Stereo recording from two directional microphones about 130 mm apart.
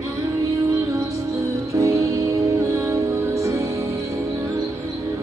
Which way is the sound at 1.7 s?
25° right (ahead or behind).